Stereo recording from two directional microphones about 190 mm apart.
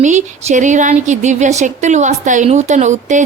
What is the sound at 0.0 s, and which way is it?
Speech, 40° right (ahead or behind).